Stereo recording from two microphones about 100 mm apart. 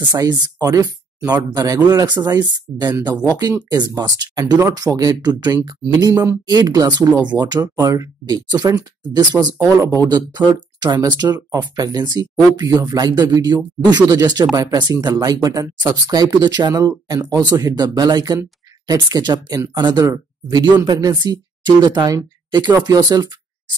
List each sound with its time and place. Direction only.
0.0 s speech: 45° right (ahead or behind)